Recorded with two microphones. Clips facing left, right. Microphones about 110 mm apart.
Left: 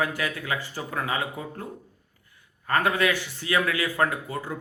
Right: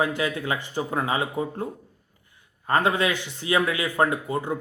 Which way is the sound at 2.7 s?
25° right (ahead or behind).